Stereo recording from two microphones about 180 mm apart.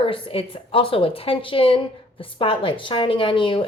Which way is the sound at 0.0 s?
30° left (ahead or behind).